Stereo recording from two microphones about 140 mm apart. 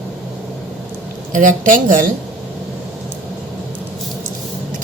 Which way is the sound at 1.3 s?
70° right (ahead or behind).